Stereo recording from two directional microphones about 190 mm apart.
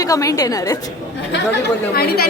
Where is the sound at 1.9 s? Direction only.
55° left (ahead or behind).